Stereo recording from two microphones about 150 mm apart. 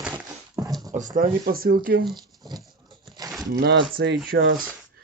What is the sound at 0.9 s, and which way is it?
Speech, 60° right (ahead or behind).